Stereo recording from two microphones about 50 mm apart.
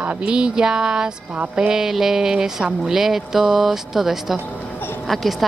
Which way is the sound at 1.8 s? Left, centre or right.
Centre.